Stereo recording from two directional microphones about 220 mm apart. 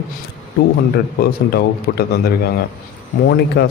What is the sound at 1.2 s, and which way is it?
A man's voice, 45° left (ahead or behind).